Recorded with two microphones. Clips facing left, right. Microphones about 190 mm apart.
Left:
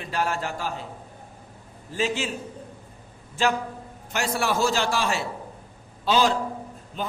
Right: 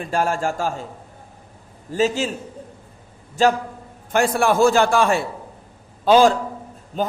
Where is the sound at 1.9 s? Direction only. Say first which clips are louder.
Right 6 dB; 40° right (ahead or behind).